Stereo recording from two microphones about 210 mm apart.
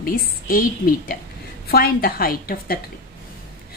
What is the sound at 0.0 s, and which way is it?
A woman's voice, 40° left (ahead or behind).